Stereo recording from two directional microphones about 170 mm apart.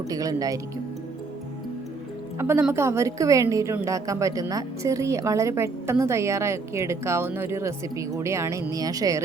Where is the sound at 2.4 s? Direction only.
15° right (ahead or behind).